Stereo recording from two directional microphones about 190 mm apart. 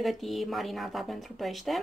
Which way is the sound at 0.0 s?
Centre (ahead or behind).